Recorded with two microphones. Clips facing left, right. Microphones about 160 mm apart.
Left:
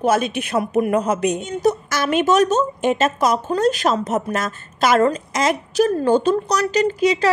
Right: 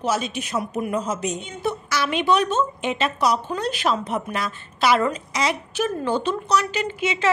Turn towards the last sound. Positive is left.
turn(degrees=35)  # may be behind; listen again after turning